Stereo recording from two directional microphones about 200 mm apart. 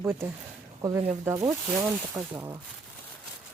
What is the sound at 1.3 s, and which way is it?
Speech, 15° right (ahead or behind).